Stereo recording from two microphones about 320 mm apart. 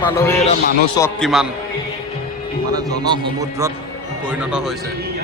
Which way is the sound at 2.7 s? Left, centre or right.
Centre.